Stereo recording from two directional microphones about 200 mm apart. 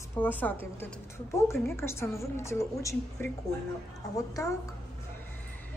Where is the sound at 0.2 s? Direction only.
10° left (ahead or behind).